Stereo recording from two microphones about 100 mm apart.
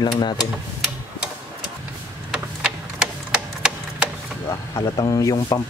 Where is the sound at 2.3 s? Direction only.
10° right (ahead or behind).